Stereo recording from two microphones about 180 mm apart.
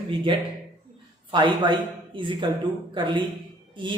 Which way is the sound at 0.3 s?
30° right (ahead or behind).